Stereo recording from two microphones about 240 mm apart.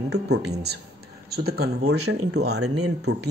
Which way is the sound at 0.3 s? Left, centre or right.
Right.